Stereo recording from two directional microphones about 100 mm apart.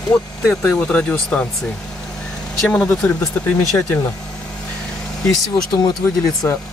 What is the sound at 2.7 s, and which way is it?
Speech, 5° left (ahead or behind).